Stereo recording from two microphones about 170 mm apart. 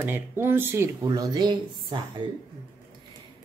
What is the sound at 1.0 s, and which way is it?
Speech, 25° right (ahead or behind).